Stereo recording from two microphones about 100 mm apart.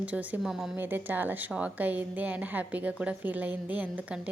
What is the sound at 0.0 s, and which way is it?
A woman's voice, 15° right (ahead or behind).